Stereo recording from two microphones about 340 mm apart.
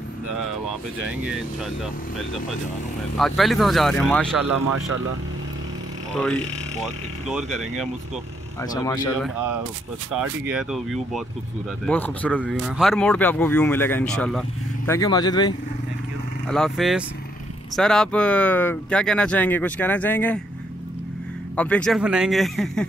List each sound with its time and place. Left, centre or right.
3.2 s speech: centre
4.6 s speech: right
6.8 s speech: centre
8.7 s speech: centre
10.1 s speech: centre
16.4 s speech: centre
21.5 s speech: centre